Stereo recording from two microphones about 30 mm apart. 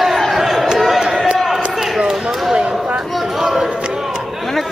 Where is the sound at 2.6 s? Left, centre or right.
Right.